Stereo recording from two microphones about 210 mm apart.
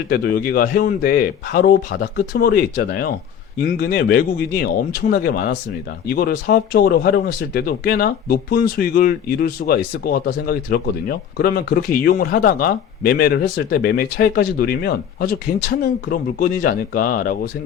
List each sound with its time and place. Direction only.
0.1 s speech: 45° left (ahead or behind)